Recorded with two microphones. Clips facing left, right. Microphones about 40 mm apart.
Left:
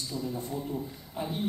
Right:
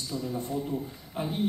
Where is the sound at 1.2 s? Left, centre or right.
Right.